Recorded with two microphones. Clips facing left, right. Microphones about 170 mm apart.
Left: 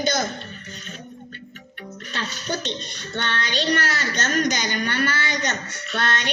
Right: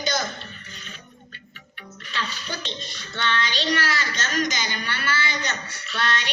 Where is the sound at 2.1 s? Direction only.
50° left (ahead or behind).